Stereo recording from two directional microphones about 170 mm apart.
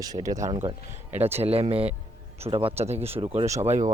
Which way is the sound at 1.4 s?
35° right (ahead or behind).